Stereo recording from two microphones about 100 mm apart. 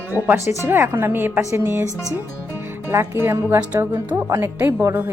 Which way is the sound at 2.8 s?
25° right (ahead or behind).